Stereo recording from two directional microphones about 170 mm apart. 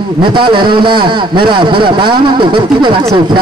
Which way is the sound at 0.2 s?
30° right (ahead or behind).